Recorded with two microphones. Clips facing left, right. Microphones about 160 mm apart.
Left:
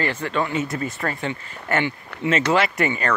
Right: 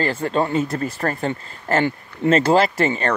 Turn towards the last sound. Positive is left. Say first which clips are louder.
# right 3 dB
turn(degrees=-30)  # may be behind; listen again after turning